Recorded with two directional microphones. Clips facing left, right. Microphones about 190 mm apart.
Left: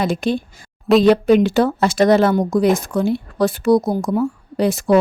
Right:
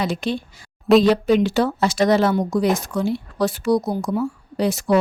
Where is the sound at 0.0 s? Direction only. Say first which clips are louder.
Left 4 dB; 50° left (ahead or behind).